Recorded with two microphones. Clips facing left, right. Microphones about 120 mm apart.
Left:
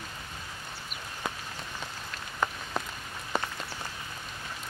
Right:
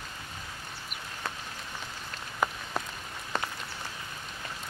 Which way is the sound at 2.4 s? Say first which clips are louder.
Right 1 dB; 10° right (ahead or behind).